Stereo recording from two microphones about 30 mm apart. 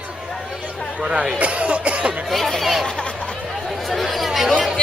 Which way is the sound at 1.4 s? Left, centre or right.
Right.